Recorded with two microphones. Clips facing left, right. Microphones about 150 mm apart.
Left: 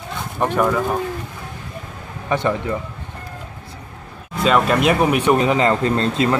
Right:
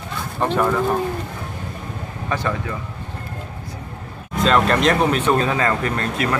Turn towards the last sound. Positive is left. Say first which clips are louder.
# left 4 dB
turn(degrees=25)  # may be behind; listen again after turning